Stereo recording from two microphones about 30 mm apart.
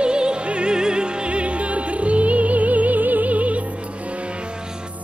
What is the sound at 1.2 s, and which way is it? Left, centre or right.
Music, right.